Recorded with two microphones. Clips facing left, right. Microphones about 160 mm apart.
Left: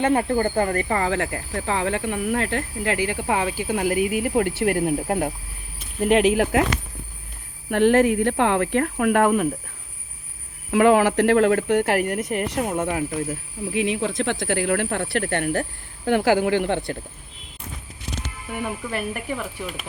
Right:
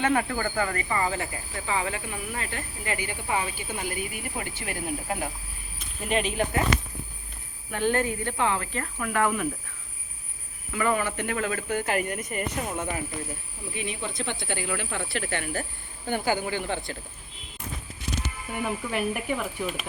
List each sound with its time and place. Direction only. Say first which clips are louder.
0.1 s speech: left 6 dB; 30° left (ahead or behind)
0.8 s speech: left 5 dB; 55° left (ahead or behind)
6.0 s speech: left 9 dB; 70° left (ahead or behind); by 6.7 s 85° left
7.7 s speech: left 9 dB; 75° left (ahead or behind); by 9.5 s 50° left (ahead or behind)
10.7 s speech: left 10 dB; 80° left
13.7 s speech: left 10 dB; 90° left; by 15.6 s 60° left (ahead or behind)
16.0 s speech: left 8 dB; 90° left; by 17.0 s 60° left (ahead or behind)
18.5 s speech: left 1 dB; 5° left (ahead or behind)